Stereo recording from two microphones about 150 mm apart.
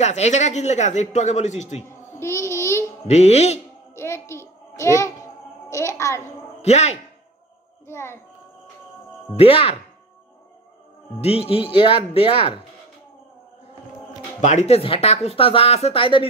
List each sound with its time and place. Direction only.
0.0 s speech: 50° left (ahead or behind)
2.1 s child singing: 20° left (ahead or behind)
3.1 s speech: 45° left (ahead or behind)
3.9 s a sound: 15° left (ahead or behind)
5.7 s a child's voice: 20° left (ahead or behind)
6.6 s speech: 50° left (ahead or behind)
7.9 s a child's voice: 15° left (ahead or behind)
9.4 s speech: 40° left (ahead or behind)
11.1 s speech: 40° left (ahead or behind)
14.4 s speech: 50° left (ahead or behind); by 16.3 s 35° left (ahead or behind)